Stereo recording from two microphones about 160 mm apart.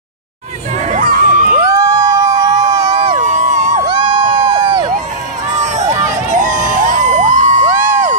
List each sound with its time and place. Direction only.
0.8 s crowd: 55° right (ahead or behind)
1.6 s crowd: 20° right (ahead or behind)
3.2 s a sound: 50° right (ahead or behind)
3.8 s crowd: 30° right (ahead or behind)
5.6 s crowd: 45° right (ahead or behind)